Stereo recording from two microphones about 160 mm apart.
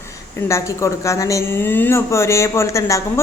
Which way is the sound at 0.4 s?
20° left (ahead or behind).